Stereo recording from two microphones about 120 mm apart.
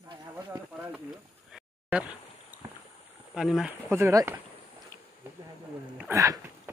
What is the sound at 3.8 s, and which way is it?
Speech, 20° right (ahead or behind).